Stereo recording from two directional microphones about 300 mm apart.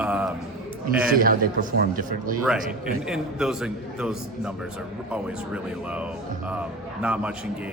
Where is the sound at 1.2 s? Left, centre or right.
Right.